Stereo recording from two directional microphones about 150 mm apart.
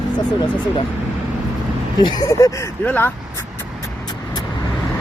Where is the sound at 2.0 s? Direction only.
25° left (ahead or behind).